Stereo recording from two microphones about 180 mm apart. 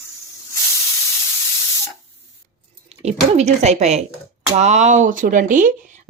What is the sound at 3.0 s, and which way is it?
A woman's voice, 35° right (ahead or behind).